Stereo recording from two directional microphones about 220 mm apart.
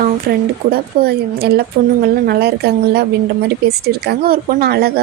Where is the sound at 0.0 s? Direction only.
45° right (ahead or behind).